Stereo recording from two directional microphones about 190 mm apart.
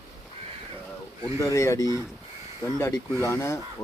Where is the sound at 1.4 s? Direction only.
15° left (ahead or behind).